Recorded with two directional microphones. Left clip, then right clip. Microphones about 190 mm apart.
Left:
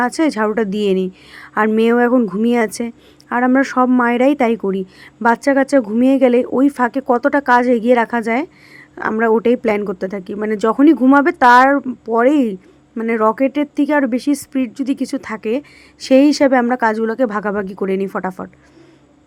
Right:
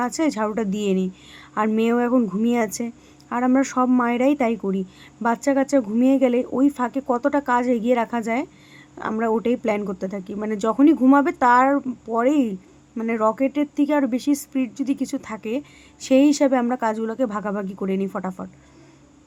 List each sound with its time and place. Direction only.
0.0 s speech: 5° left (ahead or behind)